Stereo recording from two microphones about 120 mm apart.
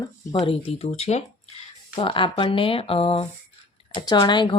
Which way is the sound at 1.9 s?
45° left (ahead or behind).